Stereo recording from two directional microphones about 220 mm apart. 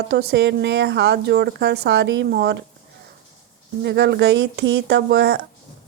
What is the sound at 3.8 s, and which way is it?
Speech, 50° right (ahead or behind).